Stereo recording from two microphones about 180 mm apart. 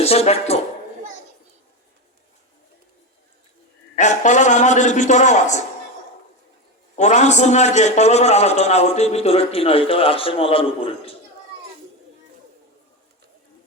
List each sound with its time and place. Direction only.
0.0 s speech: 35° left (ahead or behind)
3.9 s a man's voice: 45° left (ahead or behind)
6.9 s a man's voice: 40° left (ahead or behind)